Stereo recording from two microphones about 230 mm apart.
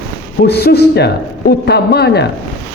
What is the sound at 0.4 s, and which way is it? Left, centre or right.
Speech, left.